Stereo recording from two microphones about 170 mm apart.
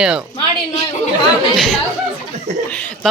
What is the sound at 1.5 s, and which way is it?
Speech, centre (ahead or behind).